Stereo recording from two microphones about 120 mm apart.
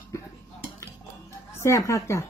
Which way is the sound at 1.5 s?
25° left (ahead or behind).